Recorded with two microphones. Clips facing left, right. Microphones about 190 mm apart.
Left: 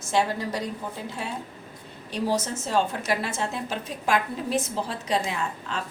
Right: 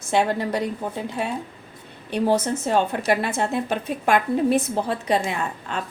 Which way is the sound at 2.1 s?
60° right (ahead or behind).